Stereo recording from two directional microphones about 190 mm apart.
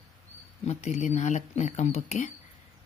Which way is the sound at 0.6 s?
35° left (ahead or behind).